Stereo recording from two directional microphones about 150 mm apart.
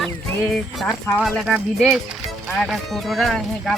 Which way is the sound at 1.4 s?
5° right (ahead or behind).